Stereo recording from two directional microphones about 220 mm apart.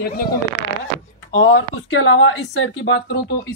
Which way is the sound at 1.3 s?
60° left (ahead or behind).